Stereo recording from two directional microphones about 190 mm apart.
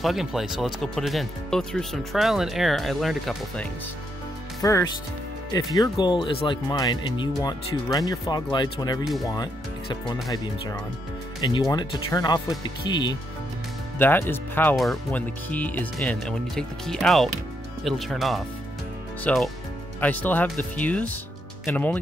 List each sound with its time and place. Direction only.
0.0 s speech: centre (ahead or behind)
4.6 s speech: 20° left (ahead or behind)
9.0 s speech: centre (ahead or behind)
11.4 s speech: 20° left (ahead or behind)
13.9 s speech: 10° left (ahead or behind)